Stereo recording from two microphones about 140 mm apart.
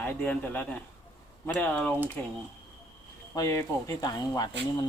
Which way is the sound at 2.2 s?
10° left (ahead or behind).